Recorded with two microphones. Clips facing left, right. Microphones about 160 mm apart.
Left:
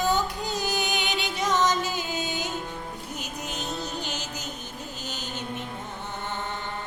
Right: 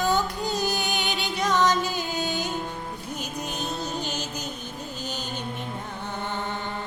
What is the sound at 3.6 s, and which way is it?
Music, 15° right (ahead or behind).